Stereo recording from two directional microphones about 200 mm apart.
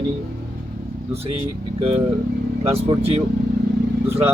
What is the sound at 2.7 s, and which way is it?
Speech, 30° right (ahead or behind).